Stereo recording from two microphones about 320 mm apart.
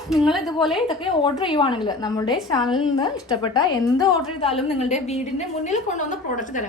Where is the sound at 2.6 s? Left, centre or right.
Centre.